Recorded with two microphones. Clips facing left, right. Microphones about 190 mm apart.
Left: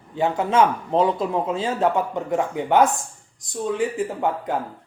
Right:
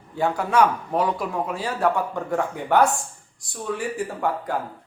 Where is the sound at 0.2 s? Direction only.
20° left (ahead or behind).